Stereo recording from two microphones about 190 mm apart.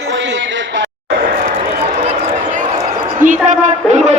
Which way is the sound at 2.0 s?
40° right (ahead or behind).